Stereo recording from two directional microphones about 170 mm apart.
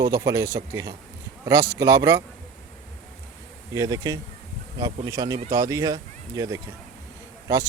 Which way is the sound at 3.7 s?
20° right (ahead or behind).